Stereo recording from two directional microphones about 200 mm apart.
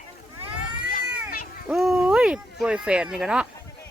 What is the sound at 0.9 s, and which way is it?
Cat, 45° left (ahead or behind).